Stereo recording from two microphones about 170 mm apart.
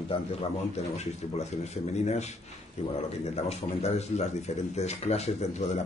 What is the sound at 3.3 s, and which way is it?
Speech, 40° left (ahead or behind).